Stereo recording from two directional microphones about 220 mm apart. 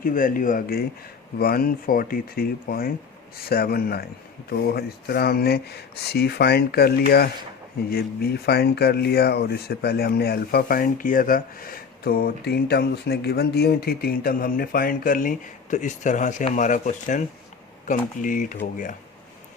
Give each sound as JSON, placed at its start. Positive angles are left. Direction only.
{"t": 0.0, "sound": "speech", "side_deg": 40}